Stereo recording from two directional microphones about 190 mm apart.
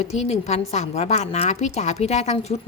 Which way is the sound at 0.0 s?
35° left (ahead or behind).